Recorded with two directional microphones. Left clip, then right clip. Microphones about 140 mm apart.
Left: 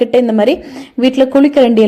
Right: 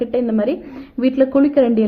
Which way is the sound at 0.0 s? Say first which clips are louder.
Left 8 dB; 35° left (ahead or behind).